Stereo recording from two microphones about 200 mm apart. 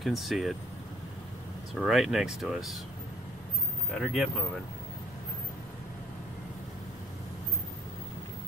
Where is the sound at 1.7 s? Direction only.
Centre (ahead or behind).